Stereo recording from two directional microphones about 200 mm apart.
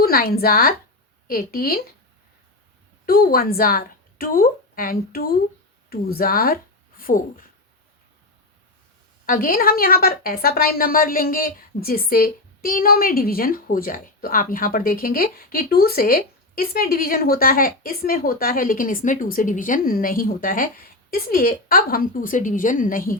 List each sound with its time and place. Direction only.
0.0 s a woman's voice: 50° left (ahead or behind)
3.1 s a woman's voice: 50° left (ahead or behind)
9.2 s a woman's voice: 45° left (ahead or behind)